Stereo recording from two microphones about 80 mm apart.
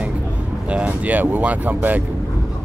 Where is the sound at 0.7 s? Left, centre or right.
Centre.